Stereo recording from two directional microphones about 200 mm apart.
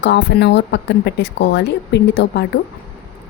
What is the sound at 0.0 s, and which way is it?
A woman's voice, 60° left (ahead or behind).